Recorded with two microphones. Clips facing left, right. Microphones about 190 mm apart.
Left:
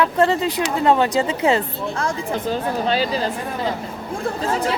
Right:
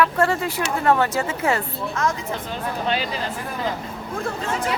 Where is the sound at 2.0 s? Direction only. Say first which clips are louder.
Even; 35° left (ahead or behind).